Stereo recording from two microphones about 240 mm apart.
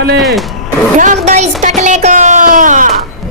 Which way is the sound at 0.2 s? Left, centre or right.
Centre.